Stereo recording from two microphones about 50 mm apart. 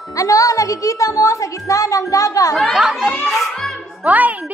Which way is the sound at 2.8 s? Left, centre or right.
Centre.